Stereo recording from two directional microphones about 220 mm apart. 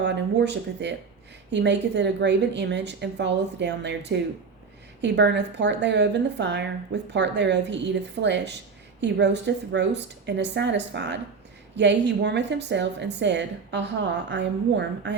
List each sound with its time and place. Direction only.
0.0 s a woman's voice: 50° right (ahead or behind)